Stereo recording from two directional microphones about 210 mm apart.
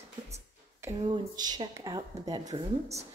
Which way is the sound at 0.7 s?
15° right (ahead or behind).